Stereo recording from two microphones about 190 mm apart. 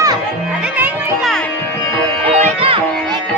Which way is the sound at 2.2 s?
30° right (ahead or behind).